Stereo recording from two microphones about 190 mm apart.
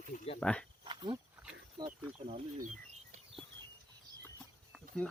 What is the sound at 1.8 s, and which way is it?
Snake, 25° right (ahead or behind).